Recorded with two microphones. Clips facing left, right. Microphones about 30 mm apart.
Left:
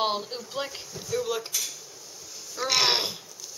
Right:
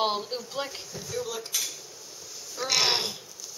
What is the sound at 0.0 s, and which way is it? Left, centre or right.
A woman's voice, centre.